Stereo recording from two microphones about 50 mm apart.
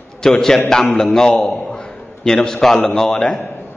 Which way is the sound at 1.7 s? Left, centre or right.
Centre.